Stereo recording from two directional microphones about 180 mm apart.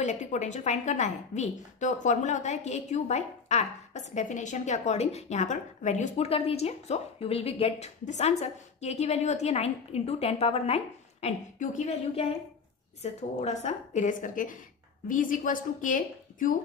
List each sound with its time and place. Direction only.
0.0 s a woman's voice: 40° left (ahead or behind)